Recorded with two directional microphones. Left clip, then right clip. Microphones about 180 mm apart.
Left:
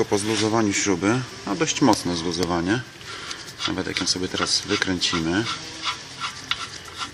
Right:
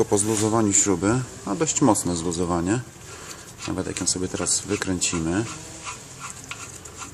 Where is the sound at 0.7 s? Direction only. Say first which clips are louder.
Right 1 dB; 10° right (ahead or behind).